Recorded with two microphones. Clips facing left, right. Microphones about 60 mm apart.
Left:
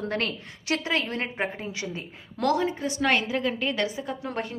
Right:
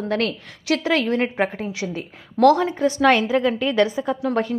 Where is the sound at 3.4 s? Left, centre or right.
Centre.